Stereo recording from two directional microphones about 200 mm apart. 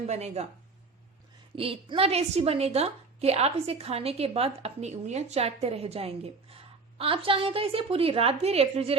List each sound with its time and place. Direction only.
0.0 s a woman's voice: 35° right (ahead or behind)
1.5 s a woman's voice: 25° right (ahead or behind)